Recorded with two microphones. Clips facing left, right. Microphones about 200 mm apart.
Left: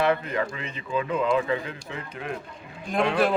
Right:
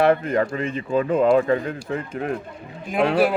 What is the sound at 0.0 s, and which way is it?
Speech, 45° right (ahead or behind).